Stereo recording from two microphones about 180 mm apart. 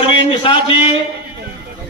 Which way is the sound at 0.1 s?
30° left (ahead or behind).